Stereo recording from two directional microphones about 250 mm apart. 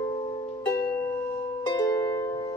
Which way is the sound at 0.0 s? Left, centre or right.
Left.